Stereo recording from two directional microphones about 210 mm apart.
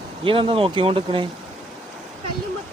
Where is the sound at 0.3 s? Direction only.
25° right (ahead or behind).